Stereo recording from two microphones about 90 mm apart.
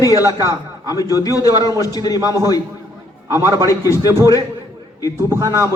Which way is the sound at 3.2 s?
35° right (ahead or behind).